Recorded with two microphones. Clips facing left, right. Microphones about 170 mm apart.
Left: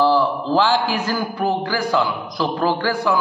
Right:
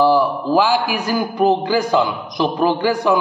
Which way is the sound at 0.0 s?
15° right (ahead or behind).